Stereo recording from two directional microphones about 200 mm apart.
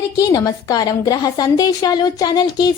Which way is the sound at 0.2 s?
15° left (ahead or behind).